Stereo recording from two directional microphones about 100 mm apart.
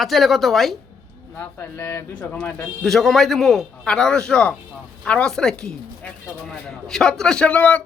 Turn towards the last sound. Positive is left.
turn(degrees=15)  # may be behind; listen again after turning